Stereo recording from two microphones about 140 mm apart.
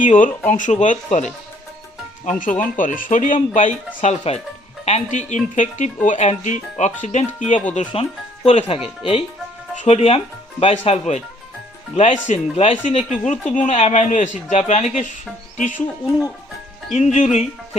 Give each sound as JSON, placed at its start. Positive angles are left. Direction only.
{"t": 0.0, "sound": "speech", "side_deg": 65}
{"t": 2.4, "sound": "speech", "side_deg": 70}
{"t": 8.4, "sound": "speech", "side_deg": 45}
{"t": 16.9, "sound": "speech", "side_deg": 55}